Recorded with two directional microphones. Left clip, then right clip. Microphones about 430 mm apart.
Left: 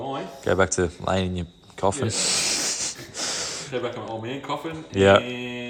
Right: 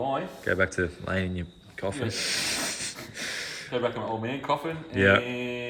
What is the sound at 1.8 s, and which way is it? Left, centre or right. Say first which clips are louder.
Snort: left 6 dB; centre.